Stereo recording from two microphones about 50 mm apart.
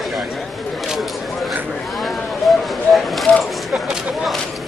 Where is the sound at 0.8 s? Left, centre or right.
Centre.